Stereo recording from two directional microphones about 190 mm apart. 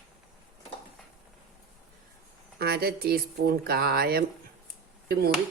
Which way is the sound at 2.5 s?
55° right (ahead or behind).